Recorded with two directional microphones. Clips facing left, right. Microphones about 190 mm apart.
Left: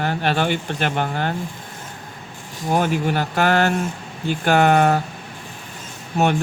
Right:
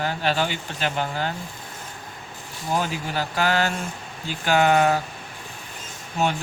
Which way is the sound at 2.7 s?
55° left (ahead or behind).